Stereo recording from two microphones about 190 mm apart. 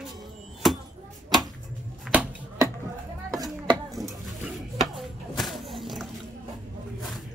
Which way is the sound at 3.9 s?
Centre (ahead or behind).